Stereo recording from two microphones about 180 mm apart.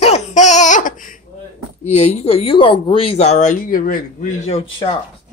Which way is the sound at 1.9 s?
40° left (ahead or behind).